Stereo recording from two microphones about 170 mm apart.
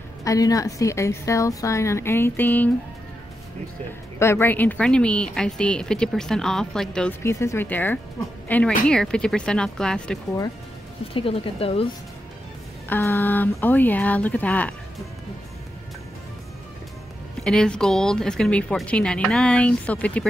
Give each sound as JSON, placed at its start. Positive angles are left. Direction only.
{"t": 0.2, "sound": "a woman's voice", "side_deg": 20}
{"t": 4.2, "sound": "speech", "side_deg": 15}
{"t": 7.2, "sound": "a woman's voice", "side_deg": 15}
{"t": 11.1, "sound": "speech", "side_deg": 30}
{"t": 12.8, "sound": "a woman's voice", "side_deg": 15}
{"t": 17.4, "sound": "speech", "side_deg": 5}